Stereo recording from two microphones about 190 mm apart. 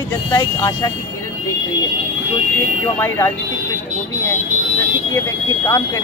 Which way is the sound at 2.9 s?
10° left (ahead or behind).